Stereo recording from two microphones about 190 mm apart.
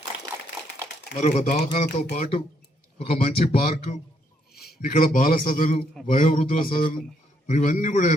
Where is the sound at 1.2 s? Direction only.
40° left (ahead or behind).